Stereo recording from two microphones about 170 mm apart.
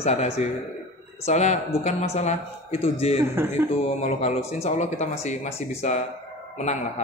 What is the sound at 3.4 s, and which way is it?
Speech, 15° right (ahead or behind).